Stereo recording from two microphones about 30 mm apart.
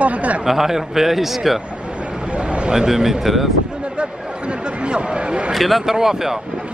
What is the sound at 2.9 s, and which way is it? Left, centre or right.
Speech, centre.